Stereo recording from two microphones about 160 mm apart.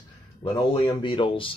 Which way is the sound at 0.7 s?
30° left (ahead or behind).